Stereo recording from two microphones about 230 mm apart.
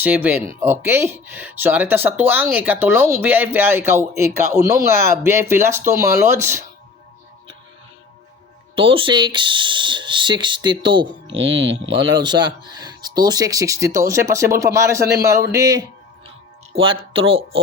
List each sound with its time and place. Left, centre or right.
0.0 s speech: centre
8.7 s speech: right
11.3 s speech: right
12.1 s speech: centre